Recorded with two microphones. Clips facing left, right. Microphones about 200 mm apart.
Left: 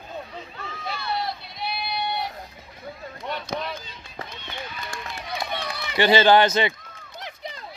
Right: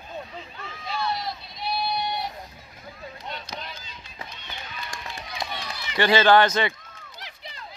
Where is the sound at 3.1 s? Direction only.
55° left (ahead or behind).